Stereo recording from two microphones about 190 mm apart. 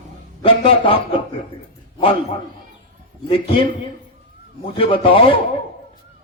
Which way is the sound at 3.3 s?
30° left (ahead or behind).